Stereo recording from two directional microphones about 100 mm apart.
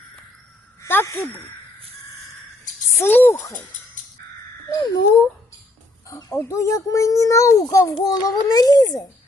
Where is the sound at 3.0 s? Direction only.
20° left (ahead or behind).